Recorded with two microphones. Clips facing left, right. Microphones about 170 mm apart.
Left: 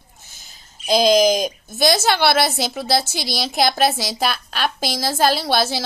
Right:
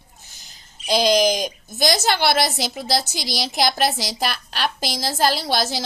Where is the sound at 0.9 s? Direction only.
45° left (ahead or behind).